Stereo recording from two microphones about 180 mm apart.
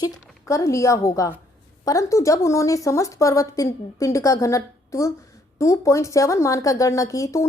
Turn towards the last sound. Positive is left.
turn(degrees=15)  # may be behind; listen again after turning